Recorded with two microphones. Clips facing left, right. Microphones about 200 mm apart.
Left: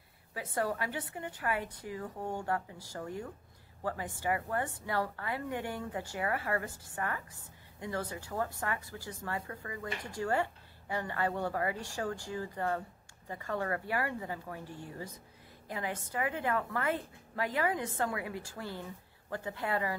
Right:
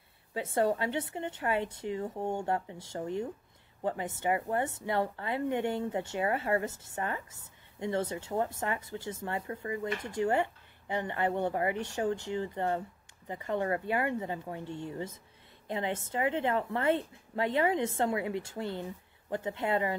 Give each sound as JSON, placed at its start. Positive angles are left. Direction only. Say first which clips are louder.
{"t": 0.3, "sound": "a woman's voice", "louder": "right 6 dB", "side_deg": -25}